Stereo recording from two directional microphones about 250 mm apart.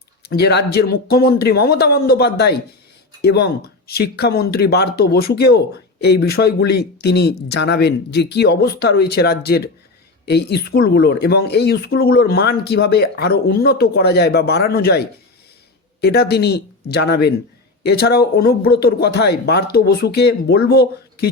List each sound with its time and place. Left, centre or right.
0.2 s speech: left